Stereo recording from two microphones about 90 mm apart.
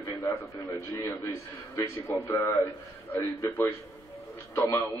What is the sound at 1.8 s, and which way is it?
A man's voice, 25° left (ahead or behind).